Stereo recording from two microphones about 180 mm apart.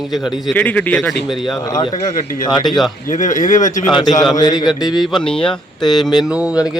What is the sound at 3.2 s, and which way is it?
Speech, 45° left (ahead or behind).